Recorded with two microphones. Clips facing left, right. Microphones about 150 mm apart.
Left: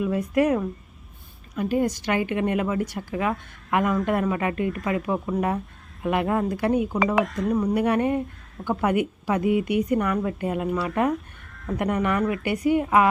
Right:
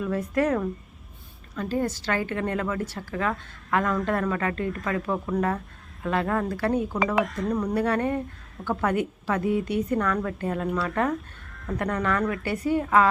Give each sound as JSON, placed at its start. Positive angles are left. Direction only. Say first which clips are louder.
{"t": 0.0, "sound": "a woman's voice", "louder": "left 3 dB", "side_deg": 10}
{"t": 7.3, "sound": "speech", "louder": "left 3 dB", "side_deg": 0}
{"t": 7.7, "sound": "a woman's voice", "louder": "left 2 dB", "side_deg": 15}
{"t": 10.7, "sound": "speech", "louder": "left 1 dB", "side_deg": 0}
{"t": 11.5, "sound": "sheep", "louder": "left 2 dB", "side_deg": 0}
{"t": 11.8, "sound": "a woman's voice", "louder": "left 2 dB", "side_deg": 15}